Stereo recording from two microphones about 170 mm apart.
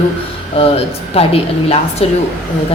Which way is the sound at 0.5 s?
35° left (ahead or behind).